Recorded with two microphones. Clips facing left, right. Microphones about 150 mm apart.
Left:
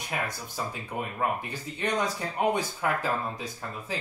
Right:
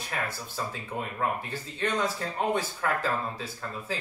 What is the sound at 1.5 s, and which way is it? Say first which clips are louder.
Speech: even; 15° left (ahead or behind).